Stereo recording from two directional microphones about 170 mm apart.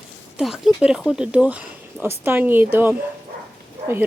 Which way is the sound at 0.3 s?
5° right (ahead or behind).